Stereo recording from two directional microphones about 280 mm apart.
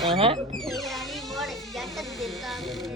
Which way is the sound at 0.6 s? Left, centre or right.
Centre.